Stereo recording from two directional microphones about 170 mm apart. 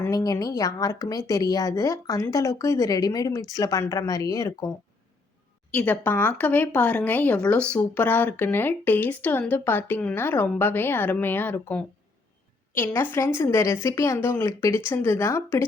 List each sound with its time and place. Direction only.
0.0 s speech: 20° left (ahead or behind)
5.7 s speech: 10° left (ahead or behind)